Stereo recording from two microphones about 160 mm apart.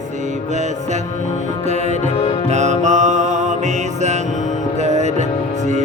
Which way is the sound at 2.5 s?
45° right (ahead or behind).